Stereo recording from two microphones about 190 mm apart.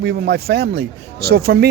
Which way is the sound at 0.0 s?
60° right (ahead or behind).